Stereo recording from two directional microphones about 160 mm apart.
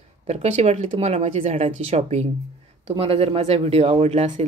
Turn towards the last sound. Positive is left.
turn(degrees=-45)  # may be behind; listen again after turning